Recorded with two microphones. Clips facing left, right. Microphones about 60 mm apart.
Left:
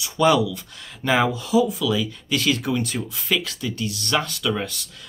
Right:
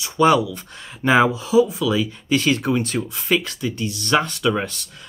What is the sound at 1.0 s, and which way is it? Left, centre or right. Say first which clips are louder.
Speech: right 4 dB; centre.